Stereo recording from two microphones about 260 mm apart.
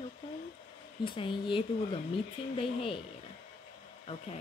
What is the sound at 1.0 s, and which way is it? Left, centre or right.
Speech, centre.